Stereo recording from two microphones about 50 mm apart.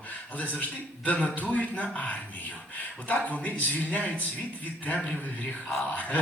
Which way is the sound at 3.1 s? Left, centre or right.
Left.